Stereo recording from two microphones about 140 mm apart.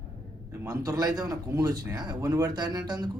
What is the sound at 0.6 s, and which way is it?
Speech, 30° right (ahead or behind).